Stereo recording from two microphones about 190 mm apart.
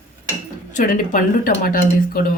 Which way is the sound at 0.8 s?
45° left (ahead or behind).